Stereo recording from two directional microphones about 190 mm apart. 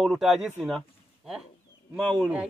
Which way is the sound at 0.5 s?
Centre (ahead or behind).